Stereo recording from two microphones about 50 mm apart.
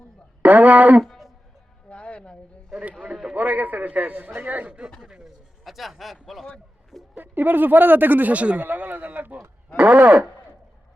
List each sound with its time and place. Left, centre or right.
0.4 s speech: right
1.9 s a sound: left
3.3 s a man's voice: right
4.9 s a sound: centre
6.2 s a man's voice: centre
7.2 s speech: right